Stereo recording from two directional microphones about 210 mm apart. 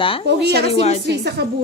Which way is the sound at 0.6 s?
30° left (ahead or behind).